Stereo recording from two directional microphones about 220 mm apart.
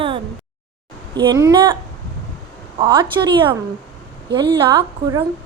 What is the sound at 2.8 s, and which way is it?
A child's voice, 20° right (ahead or behind).